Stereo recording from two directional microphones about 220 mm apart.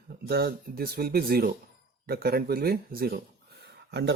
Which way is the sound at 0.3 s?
45° right (ahead or behind).